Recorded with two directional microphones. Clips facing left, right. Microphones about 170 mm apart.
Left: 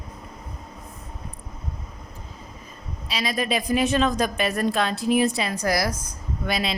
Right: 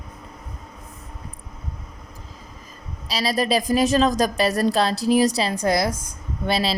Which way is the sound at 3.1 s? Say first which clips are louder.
Right 4 dB; 35° right (ahead or behind).